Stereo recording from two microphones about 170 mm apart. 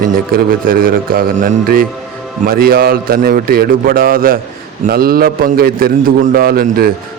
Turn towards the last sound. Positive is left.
turn(degrees=-65)  # may be behind; listen again after turning